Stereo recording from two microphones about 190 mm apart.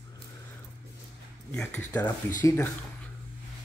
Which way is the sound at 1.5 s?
10° left (ahead or behind).